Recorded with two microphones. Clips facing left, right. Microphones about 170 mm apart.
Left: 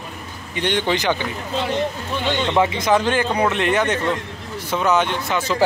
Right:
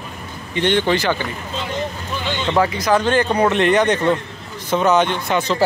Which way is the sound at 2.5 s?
20° left (ahead or behind).